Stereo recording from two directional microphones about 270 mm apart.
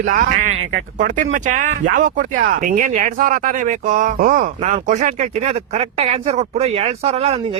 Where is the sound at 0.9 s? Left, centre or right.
Right.